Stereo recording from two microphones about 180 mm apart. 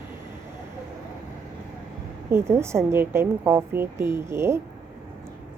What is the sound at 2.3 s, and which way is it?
A woman's voice, 15° right (ahead or behind).